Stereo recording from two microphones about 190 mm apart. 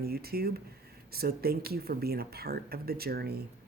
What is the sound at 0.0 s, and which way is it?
Speech, 55° right (ahead or behind).